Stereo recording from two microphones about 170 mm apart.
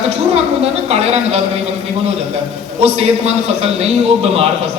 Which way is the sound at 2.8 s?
35° right (ahead or behind).